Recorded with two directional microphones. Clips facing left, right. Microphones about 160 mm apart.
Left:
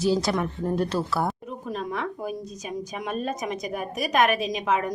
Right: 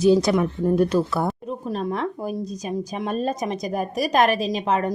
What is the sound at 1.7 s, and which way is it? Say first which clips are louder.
A woman's voice: right 4 dB; 35° right (ahead or behind).